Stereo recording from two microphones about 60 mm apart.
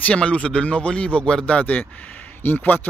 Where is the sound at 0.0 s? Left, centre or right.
Centre.